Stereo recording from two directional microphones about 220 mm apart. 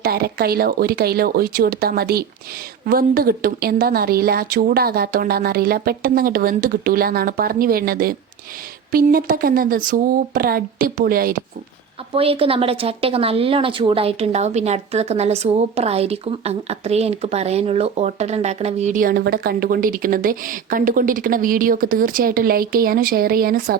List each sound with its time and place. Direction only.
0.0 s a woman's voice: 45° right (ahead or behind)
12.1 s a woman's voice: 25° right (ahead or behind); by 23.7 s 40° right (ahead or behind)